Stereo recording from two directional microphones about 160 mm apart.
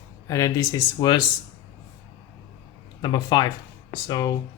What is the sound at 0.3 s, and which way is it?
Speech, 20° left (ahead or behind).